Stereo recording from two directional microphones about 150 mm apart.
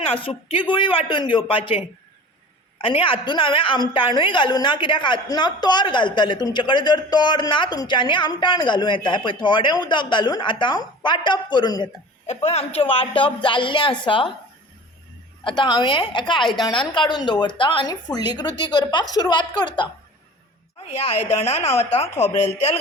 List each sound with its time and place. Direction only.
0.0 s a woman's voice: 35° left (ahead or behind)
2.8 s a woman's voice: 35° left (ahead or behind)
12.2 s a woman's voice: 45° left (ahead or behind)
15.4 s a woman's voice: 30° left (ahead or behind)
20.9 s a woman's voice: 45° left (ahead or behind)